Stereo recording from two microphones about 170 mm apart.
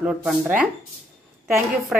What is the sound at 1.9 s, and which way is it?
Speech, centre (ahead or behind).